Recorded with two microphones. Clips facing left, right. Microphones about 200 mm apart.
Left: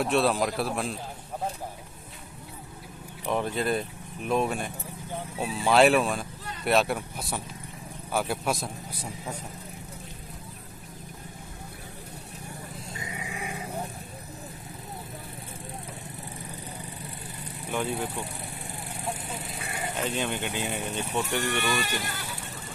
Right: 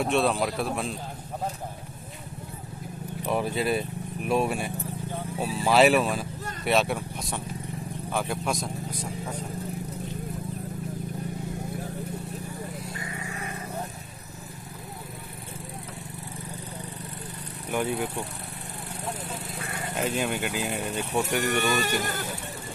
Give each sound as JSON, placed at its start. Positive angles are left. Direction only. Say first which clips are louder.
{"t": 0.0, "sound": "speech", "louder": "even", "side_deg": 0}
{"t": 3.3, "sound": "speech", "louder": "right 1 dB", "side_deg": -5}
{"t": 12.9, "sound": "vehicle", "louder": "right 1 dB", "side_deg": 20}
{"t": 17.6, "sound": "speech", "louder": "right 2 dB", "side_deg": -5}
{"t": 20.0, "sound": "speech", "louder": "right 3 dB", "side_deg": -5}
{"t": 21.4, "sound": "speech", "louder": "right 3 dB", "side_deg": -45}